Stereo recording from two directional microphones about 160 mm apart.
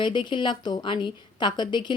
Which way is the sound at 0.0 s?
30° left (ahead or behind).